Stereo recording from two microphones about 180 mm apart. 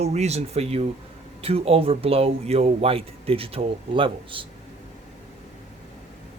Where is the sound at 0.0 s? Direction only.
35° right (ahead or behind).